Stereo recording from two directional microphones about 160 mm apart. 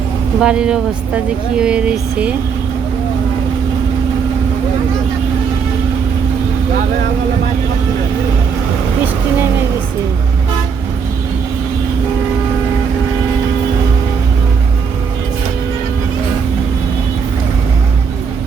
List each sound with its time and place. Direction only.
0.3 s speech: 5° right (ahead or behind)